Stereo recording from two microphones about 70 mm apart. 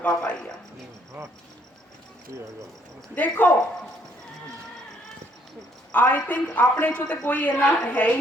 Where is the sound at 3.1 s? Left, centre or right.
Left.